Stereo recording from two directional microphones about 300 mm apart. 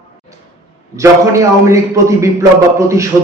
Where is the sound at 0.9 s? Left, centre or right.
Centre.